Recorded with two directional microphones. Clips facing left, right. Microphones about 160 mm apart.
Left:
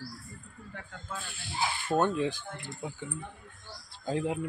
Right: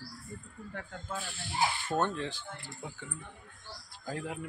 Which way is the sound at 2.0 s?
10° left (ahead or behind).